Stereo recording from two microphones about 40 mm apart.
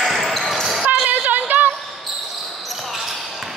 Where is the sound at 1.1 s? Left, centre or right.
Right.